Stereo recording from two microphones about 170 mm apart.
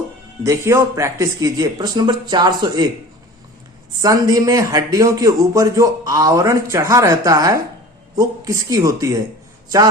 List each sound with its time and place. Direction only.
0.4 s a man's voice: 15° right (ahead or behind)
4.0 s a man's voice: 20° right (ahead or behind)